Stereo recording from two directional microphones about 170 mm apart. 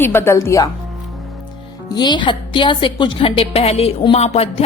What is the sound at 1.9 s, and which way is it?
A woman's voice, 25° left (ahead or behind).